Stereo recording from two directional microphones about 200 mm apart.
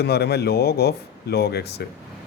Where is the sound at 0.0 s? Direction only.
55° left (ahead or behind).